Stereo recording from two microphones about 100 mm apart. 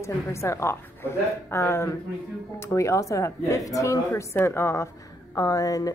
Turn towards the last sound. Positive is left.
turn(degrees=35)  # may be behind; listen again after turning